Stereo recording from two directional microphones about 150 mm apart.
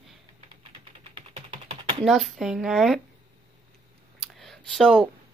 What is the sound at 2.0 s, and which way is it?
Speech, centre (ahead or behind).